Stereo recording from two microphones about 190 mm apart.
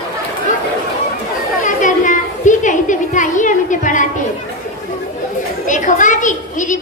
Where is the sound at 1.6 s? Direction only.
45° left (ahead or behind).